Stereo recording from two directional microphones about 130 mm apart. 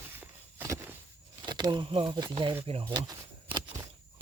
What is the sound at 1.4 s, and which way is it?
Speech, 35° right (ahead or behind).